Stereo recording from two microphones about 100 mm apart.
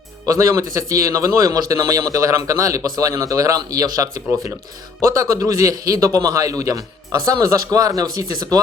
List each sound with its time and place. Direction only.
0.3 s a man's voice: 30° right (ahead or behind)